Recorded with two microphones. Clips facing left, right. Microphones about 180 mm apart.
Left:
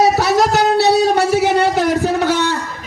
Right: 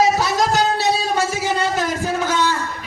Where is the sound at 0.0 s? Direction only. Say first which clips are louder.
Left 4 dB; 65° left (ahead or behind).